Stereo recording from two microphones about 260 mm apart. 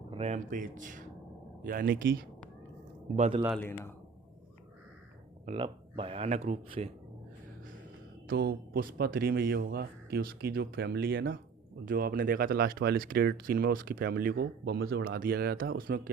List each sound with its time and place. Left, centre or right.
0.1 s speech: right
3.2 s speech: right
3.6 s speech: centre
5.5 s speech: right
8.3 s speech: right